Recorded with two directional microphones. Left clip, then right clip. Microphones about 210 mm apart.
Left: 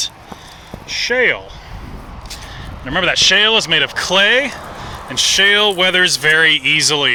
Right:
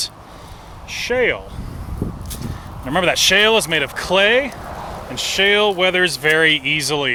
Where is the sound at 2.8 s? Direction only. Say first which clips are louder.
Left 2 dB; 15° right (ahead or behind).